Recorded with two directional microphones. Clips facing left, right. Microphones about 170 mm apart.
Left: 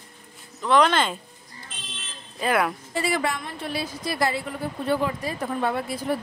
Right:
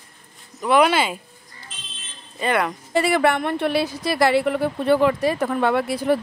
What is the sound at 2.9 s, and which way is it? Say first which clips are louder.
A woman's voice: right 7 dB; 65° right (ahead or behind).